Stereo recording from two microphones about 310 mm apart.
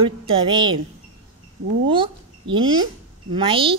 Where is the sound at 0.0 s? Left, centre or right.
Centre.